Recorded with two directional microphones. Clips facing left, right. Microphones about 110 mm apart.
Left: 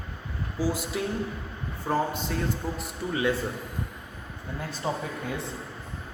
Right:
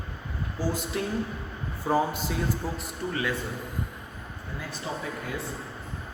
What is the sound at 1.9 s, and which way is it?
Speech, 10° right (ahead or behind).